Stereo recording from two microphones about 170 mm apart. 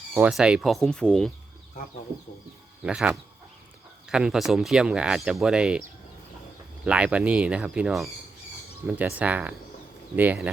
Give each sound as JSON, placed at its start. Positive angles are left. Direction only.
{"t": 0.1, "sound": "speech", "side_deg": -5}
{"t": 2.8, "sound": "speech", "side_deg": -5}
{"t": 6.8, "sound": "speech", "side_deg": -5}